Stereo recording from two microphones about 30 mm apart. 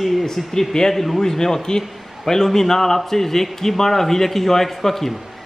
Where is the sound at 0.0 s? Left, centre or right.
Centre.